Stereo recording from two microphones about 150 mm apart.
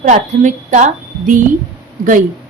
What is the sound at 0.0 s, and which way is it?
Speech, 55° right (ahead or behind).